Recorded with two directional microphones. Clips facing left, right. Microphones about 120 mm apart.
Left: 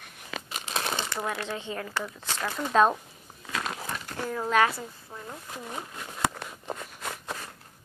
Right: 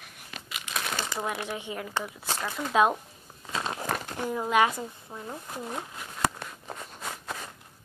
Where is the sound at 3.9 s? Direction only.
70° right (ahead or behind).